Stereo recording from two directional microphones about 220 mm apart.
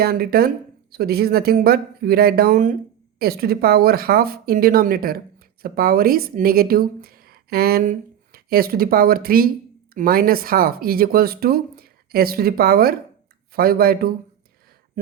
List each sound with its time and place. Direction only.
0.0 s speech: 45° right (ahead or behind)